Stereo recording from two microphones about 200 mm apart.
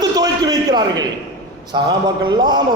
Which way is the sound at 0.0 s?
20° right (ahead or behind).